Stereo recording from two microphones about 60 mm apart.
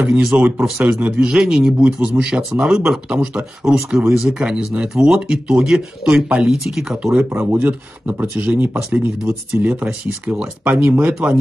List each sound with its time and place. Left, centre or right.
0.0 s speech: centre
0.3 s speech: right
0.6 s speech: centre
0.8 s speech: right
6.4 s speech: centre
7.0 s speech: centre
10.8 s speech: right